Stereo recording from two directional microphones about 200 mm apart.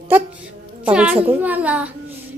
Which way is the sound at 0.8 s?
5° right (ahead or behind).